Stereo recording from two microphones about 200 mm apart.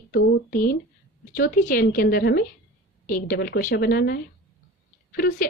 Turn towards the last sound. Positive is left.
turn(degrees=50)  # may be behind; listen again after turning